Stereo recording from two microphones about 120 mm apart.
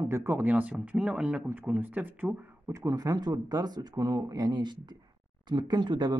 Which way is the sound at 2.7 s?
30° right (ahead or behind).